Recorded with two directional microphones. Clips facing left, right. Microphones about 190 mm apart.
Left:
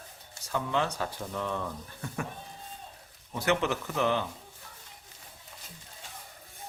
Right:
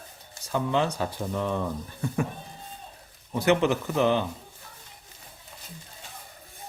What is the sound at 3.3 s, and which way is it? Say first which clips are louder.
Speech: right 6 dB; 20° right (ahead or behind).